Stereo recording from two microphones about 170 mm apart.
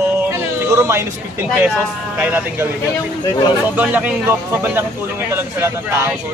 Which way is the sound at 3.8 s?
10° right (ahead or behind).